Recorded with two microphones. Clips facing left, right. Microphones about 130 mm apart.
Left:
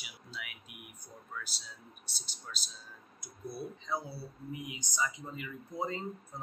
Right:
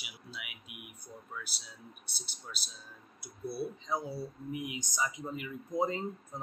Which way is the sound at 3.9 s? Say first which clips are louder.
Even; 15° right (ahead or behind).